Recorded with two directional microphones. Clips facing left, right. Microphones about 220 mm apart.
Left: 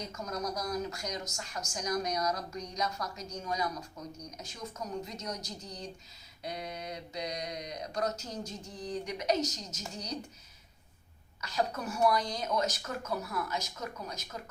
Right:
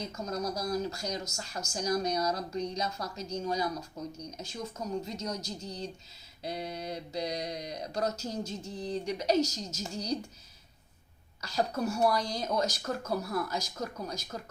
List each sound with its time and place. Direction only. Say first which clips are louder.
0.0 s a woman's voice: right 3 dB; 30° right (ahead or behind)
1.4 s mantra: right 2 dB; 30° right (ahead or behind)
1.7 s a woman's voice: right 3 dB; 30° right (ahead or behind)
6.4 s mantra: right 3 dB; 30° right (ahead or behind)
11.3 s mantra: right 2 dB; 30° right (ahead or behind)